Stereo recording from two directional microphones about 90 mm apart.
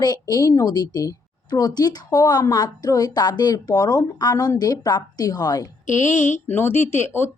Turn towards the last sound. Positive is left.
turn(degrees=25)  # may be behind; listen again after turning